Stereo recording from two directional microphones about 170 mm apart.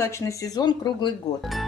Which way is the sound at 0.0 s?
15° left (ahead or behind).